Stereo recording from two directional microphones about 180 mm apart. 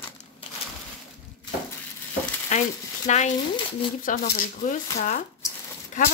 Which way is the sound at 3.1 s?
40° left (ahead or behind).